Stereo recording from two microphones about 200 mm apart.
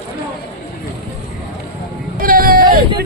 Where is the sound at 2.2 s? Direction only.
45° right (ahead or behind).